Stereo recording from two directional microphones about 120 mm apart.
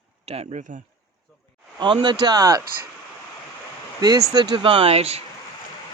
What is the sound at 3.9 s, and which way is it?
Speech, 35° right (ahead or behind).